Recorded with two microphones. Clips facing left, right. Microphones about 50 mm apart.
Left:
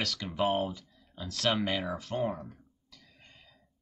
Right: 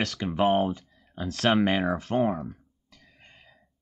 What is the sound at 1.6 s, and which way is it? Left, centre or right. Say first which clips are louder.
Speech: right 8 dB; right.